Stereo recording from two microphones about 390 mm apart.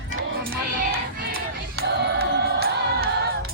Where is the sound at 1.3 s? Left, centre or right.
Right.